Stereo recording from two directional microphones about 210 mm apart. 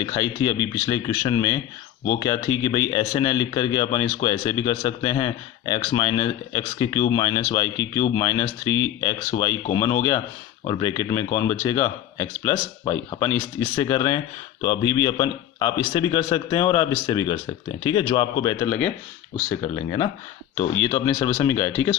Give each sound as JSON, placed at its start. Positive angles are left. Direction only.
{"t": 0.0, "sound": "speech", "side_deg": 20}